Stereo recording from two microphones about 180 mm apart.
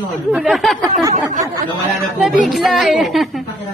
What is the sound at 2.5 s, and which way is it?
Speech, centre (ahead or behind).